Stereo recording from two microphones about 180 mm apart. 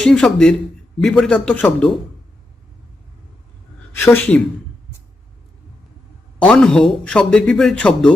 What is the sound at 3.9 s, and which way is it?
Speech, 10° left (ahead or behind).